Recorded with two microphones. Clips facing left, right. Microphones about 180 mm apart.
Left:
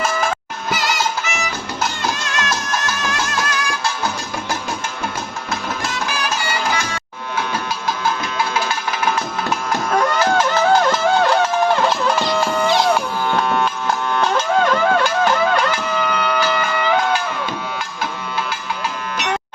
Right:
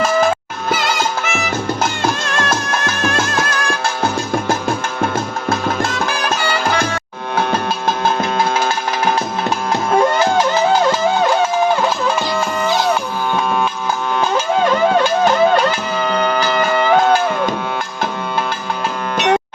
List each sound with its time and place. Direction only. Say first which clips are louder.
0.7 s music: right 3 dB; 55° right (ahead or behind)
5.5 s music: right 7 dB; 55° right (ahead or behind)
9.9 s music: right 4 dB; 25° right (ahead or behind)
11.8 s music: even; centre (ahead or behind)
16.0 s music: right 4 dB; 40° right (ahead or behind)